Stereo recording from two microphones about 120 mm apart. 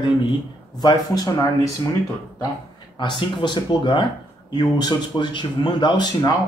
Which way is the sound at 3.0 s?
40° left (ahead or behind).